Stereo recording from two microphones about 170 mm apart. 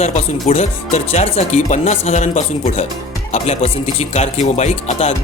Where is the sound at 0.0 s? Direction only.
40° left (ahead or behind).